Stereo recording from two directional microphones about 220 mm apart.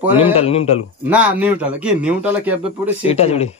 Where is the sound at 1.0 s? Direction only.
5° right (ahead or behind).